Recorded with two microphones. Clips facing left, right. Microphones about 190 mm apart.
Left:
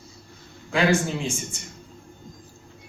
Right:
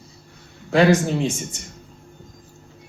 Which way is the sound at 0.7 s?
40° right (ahead or behind).